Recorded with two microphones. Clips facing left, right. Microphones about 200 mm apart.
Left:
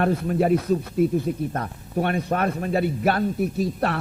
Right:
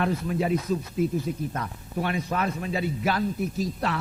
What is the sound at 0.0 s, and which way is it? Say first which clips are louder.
Speech: left 5 dB; 55° left (ahead or behind).